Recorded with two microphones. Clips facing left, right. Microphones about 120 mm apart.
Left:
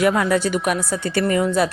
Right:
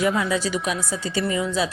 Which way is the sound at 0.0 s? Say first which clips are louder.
Left 4 dB; 65° left (ahead or behind).